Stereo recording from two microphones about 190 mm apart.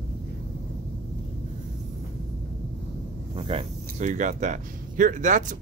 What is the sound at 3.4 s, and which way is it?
Speech, 30° right (ahead or behind).